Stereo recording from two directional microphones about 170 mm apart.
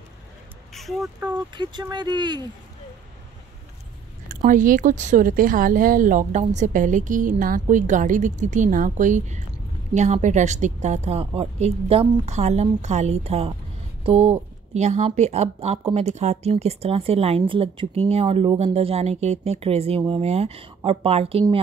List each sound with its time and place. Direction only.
0.7 s speech: centre (ahead or behind)
1.5 s speech: 25° right (ahead or behind)
4.5 s speech: 50° right (ahead or behind); by 21.5 s 35° right (ahead or behind)